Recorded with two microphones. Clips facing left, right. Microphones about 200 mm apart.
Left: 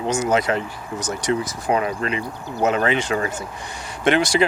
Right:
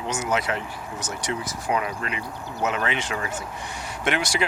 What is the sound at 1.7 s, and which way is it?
Speech, 35° left (ahead or behind).